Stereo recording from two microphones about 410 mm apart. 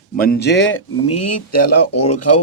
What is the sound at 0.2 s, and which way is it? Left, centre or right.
Speech, left.